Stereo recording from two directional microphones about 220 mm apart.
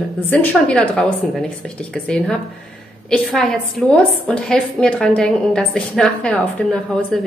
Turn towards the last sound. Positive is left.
turn(degrees=0)  # may be behind; listen again after turning